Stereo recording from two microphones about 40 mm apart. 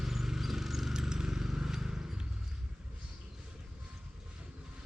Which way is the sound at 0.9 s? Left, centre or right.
Centre.